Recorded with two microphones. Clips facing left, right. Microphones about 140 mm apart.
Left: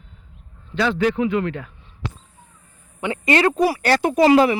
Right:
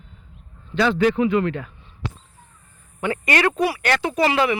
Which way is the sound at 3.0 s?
20° left (ahead or behind).